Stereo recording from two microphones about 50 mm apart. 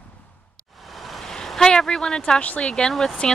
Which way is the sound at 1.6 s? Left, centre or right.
Centre.